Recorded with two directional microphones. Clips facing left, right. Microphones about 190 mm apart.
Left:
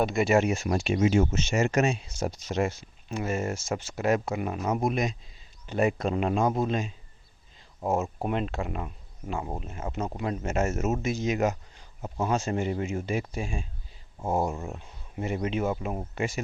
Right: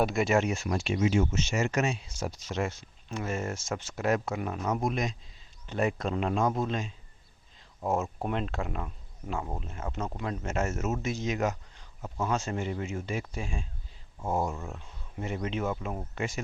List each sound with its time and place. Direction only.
0.0 s speech: centre (ahead or behind)
0.9 s speech: 45° left (ahead or behind)
1.9 s speech: 20° left (ahead or behind)